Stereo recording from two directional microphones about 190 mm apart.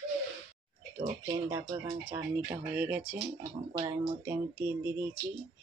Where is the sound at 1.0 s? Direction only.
20° right (ahead or behind).